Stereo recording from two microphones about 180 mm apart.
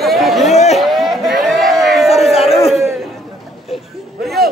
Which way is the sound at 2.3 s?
35° left (ahead or behind).